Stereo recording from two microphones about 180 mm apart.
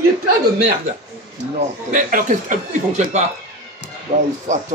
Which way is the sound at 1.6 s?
45° right (ahead or behind).